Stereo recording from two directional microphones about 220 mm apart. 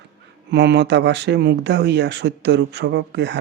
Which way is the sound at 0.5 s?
50° right (ahead or behind).